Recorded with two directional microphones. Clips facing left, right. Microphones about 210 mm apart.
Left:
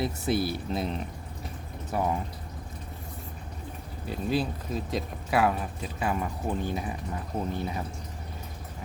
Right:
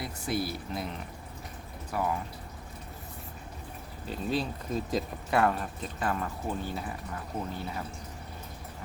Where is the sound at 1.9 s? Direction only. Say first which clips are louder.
Left 3 dB; 25° left (ahead or behind).